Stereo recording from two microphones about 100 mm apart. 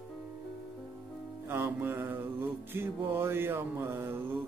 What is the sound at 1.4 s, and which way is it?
Music, 25° right (ahead or behind).